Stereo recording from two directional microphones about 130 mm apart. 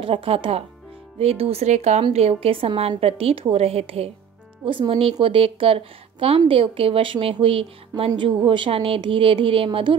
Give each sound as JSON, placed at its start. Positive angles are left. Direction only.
{"t": 0.0, "sound": "a woman's voice", "side_deg": -45}